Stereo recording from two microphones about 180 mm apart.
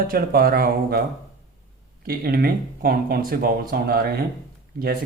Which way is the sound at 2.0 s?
55° right (ahead or behind).